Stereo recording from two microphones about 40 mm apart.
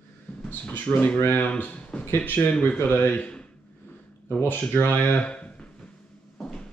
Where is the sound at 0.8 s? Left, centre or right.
Left.